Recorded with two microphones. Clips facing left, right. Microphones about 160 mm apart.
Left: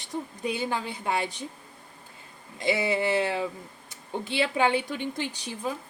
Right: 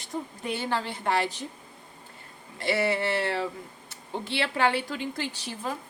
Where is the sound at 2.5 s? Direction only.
15° left (ahead or behind).